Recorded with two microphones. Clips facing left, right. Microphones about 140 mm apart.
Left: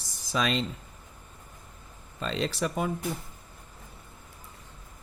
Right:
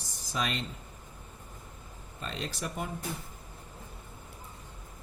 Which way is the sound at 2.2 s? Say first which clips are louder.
Left 8 dB; 90° left.